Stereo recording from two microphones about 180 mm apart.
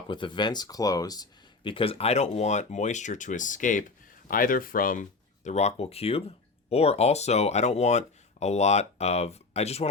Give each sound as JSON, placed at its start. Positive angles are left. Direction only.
{"t": 0.1, "sound": "speech", "side_deg": 25}